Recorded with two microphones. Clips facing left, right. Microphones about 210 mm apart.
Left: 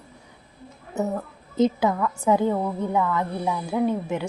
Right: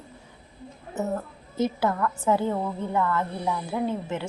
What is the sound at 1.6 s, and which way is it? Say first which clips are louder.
A woman's voice: left 4 dB; 20° left (ahead or behind).